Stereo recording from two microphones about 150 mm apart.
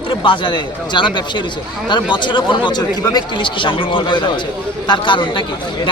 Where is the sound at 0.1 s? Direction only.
35° left (ahead or behind).